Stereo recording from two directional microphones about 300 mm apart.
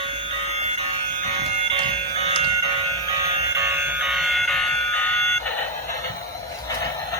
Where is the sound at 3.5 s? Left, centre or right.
Centre.